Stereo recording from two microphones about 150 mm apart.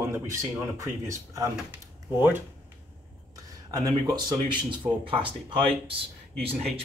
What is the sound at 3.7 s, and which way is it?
Speech, 25° right (ahead or behind).